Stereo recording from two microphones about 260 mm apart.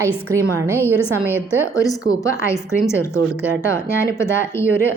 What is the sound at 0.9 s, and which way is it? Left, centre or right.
Speech, centre.